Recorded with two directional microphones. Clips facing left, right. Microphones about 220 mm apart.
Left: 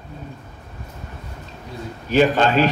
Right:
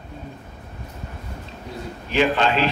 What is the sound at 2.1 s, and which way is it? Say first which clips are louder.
Speech: left 4 dB; 45° left (ahead or behind).